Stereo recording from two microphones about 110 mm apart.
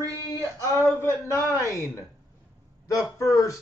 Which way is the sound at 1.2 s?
25° left (ahead or behind).